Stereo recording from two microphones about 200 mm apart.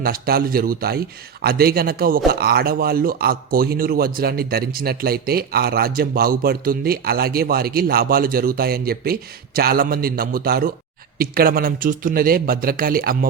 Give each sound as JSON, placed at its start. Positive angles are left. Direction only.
{"t": 0.0, "sound": "a man's voice", "side_deg": -50}